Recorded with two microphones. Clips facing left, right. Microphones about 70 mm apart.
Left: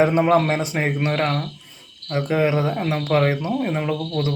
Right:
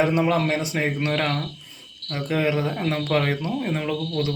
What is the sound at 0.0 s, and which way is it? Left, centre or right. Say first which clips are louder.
Speech: left 4 dB; left.